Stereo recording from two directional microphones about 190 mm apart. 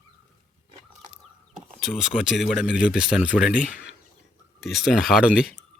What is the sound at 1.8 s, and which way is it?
Speech, centre (ahead or behind).